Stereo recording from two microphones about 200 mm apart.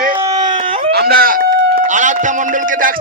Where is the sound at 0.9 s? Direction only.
50° right (ahead or behind).